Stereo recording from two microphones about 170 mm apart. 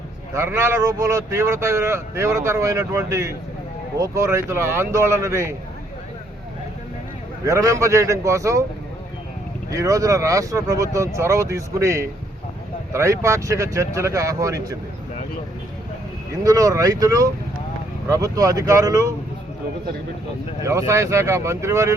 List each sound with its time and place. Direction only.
0.3 s speech: 15° right (ahead or behind)
7.4 s speech: 20° right (ahead or behind)
9.7 s speech: 20° right (ahead or behind)
16.4 s speech: 20° right (ahead or behind)
20.7 s speech: 20° right (ahead or behind)